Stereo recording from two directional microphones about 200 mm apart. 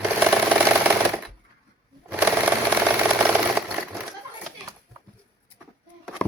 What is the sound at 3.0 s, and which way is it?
Sewing machine, 5° right (ahead or behind).